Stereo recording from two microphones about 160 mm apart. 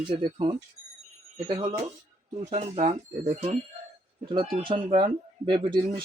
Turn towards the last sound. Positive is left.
turn(degrees=-30)  # may be behind; listen again after turning